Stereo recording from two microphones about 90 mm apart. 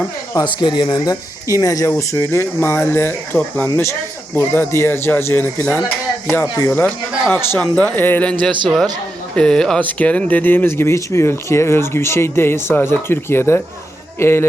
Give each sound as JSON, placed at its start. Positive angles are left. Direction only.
{"t": 0.4, "sound": "speech", "side_deg": 55}
{"t": 1.0, "sound": "speech", "side_deg": 35}
{"t": 4.4, "sound": "speech", "side_deg": 25}
{"t": 8.3, "sound": "speech", "side_deg": 10}